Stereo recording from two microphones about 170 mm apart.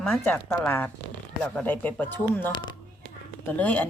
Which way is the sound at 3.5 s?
10° left (ahead or behind).